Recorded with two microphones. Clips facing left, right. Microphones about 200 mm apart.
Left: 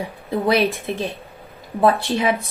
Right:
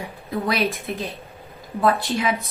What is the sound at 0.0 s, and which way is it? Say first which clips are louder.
A woman's voice: left 5 dB; 30° left (ahead or behind).